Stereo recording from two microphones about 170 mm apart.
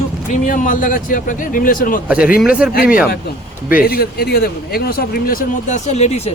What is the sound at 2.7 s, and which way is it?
Speech, 60° left (ahead or behind).